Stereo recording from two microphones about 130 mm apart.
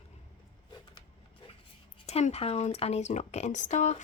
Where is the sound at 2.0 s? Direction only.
55° left (ahead or behind).